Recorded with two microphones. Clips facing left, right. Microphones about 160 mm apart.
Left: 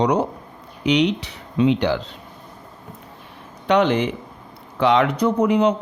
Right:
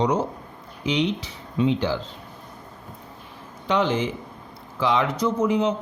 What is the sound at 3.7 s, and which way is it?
A man's voice, 65° left (ahead or behind).